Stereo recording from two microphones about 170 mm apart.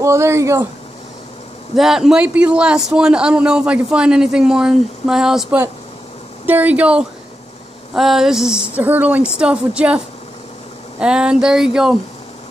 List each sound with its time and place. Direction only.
0.0 s speech: 15° right (ahead or behind)
1.8 s a man's voice: centre (ahead or behind)